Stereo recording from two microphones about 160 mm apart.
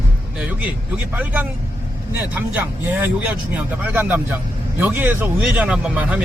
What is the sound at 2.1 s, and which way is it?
Speech, 10° right (ahead or behind).